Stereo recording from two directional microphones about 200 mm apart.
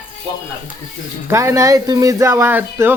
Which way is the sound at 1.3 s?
15° right (ahead or behind).